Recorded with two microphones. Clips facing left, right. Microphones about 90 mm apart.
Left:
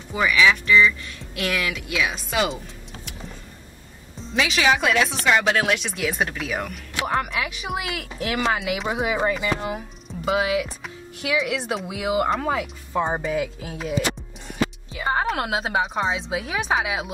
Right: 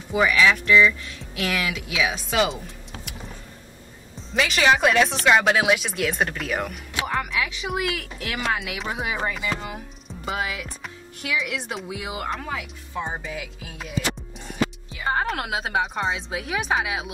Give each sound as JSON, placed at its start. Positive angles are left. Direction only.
{"t": 0.1, "sound": "speech", "side_deg": -5}
{"t": 4.3, "sound": "speech", "side_deg": 0}
{"t": 7.2, "sound": "speech", "side_deg": 40}
{"t": 7.8, "sound": "speech", "side_deg": 0}
{"t": 12.0, "sound": "speech", "side_deg": 10}
{"t": 12.4, "sound": "speech", "side_deg": 40}
{"t": 15.0, "sound": "speech", "side_deg": 5}